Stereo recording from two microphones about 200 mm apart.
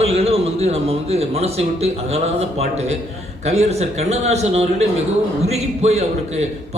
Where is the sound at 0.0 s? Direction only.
30° right (ahead or behind).